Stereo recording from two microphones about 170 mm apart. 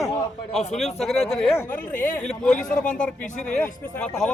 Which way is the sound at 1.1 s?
35° left (ahead or behind).